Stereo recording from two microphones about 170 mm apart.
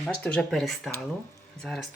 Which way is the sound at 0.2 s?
5° left (ahead or behind).